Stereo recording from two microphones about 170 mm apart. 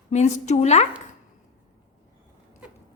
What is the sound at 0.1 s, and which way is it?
Speech, 40° left (ahead or behind).